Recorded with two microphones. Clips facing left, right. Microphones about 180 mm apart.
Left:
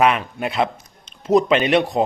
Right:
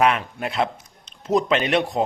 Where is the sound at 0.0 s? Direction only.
10° left (ahead or behind).